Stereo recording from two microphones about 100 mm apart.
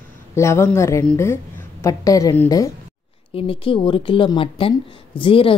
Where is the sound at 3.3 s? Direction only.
65° left (ahead or behind).